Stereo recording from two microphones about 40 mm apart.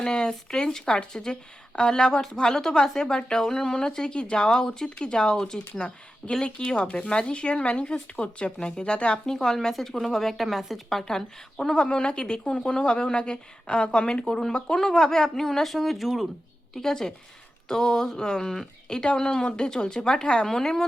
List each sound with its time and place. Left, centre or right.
0.0 s a woman's voice: centre
10.8 s speech: centre
16.7 s a woman's voice: centre